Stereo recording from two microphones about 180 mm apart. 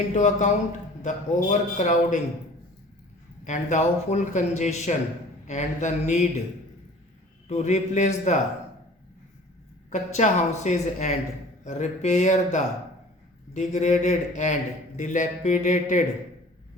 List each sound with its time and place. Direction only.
0.1 s speech: 40° left (ahead or behind)
3.4 s a man's voice: 40° left (ahead or behind)
7.4 s a man's voice: 40° left (ahead or behind)
9.9 s a man's voice: 40° left (ahead or behind)